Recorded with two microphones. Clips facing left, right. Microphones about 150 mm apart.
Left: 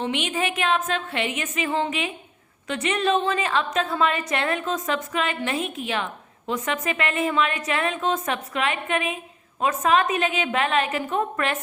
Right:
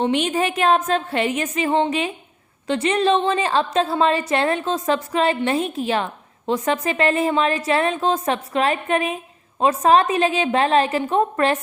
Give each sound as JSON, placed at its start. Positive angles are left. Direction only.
{"t": 0.0, "sound": "a woman's voice", "side_deg": -40}